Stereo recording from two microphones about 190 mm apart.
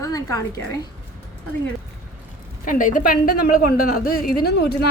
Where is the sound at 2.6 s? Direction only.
45° left (ahead or behind).